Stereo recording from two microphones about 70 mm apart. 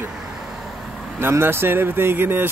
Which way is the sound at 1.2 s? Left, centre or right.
Right.